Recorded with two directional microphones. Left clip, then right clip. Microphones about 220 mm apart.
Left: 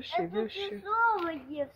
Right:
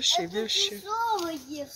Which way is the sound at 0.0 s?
5° right (ahead or behind).